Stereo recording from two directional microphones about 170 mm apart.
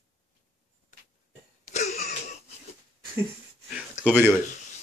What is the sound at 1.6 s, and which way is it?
Wheeze, 40° left (ahead or behind).